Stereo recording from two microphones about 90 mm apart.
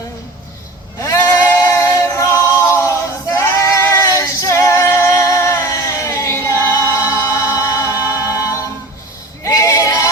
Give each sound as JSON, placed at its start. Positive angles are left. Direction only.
{"t": 1.0, "sound": "a capella", "side_deg": 35}
{"t": 9.4, "sound": "female singing", "side_deg": 35}